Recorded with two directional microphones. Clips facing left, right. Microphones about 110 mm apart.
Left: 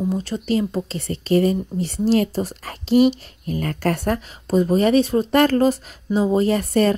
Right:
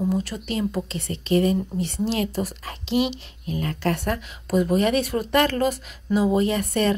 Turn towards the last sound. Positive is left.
turn(degrees=35)  # may be behind; listen again after turning